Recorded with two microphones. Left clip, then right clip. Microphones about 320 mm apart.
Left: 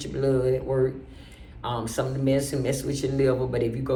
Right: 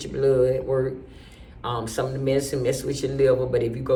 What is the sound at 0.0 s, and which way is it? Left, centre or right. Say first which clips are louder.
Speech: right 4 dB; centre.